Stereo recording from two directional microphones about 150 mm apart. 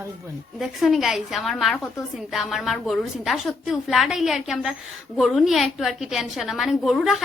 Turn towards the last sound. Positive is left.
turn(degrees=0)  # may be behind; listen again after turning